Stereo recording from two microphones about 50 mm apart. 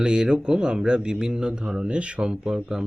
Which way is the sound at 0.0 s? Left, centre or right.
Centre.